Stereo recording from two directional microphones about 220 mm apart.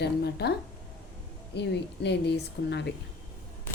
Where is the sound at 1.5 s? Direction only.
50° left (ahead or behind).